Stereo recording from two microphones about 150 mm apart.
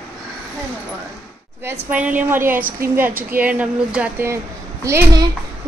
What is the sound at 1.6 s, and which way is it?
Speech, 10° right (ahead or behind).